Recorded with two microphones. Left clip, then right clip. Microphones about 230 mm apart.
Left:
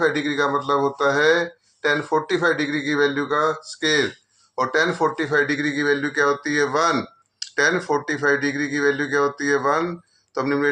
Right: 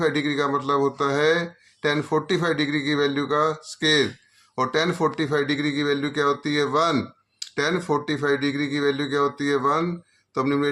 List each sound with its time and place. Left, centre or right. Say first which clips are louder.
0.0 s speech: left 2 dB; right